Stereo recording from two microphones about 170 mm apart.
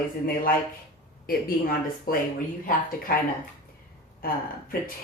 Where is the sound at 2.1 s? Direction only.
55° left (ahead or behind).